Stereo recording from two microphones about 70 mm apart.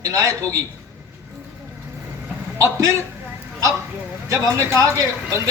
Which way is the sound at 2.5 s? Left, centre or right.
Right.